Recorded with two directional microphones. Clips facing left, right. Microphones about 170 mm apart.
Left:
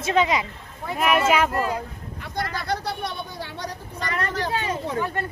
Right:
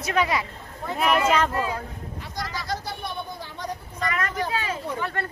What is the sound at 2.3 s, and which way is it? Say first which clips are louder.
Vehicle: left 4 dB; 60° left (ahead or behind).